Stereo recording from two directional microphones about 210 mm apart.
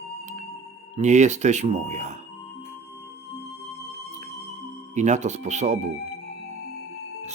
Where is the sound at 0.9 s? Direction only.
35° right (ahead or behind).